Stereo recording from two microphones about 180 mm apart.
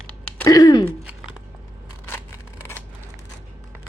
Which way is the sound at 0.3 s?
20° left (ahead or behind).